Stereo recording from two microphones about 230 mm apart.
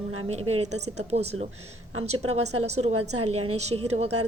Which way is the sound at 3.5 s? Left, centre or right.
Right.